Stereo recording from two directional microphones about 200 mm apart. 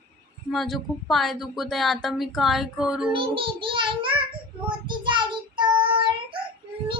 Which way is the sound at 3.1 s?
25° right (ahead or behind).